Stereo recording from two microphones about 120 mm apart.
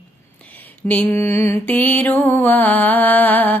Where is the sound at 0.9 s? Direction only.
15° left (ahead or behind).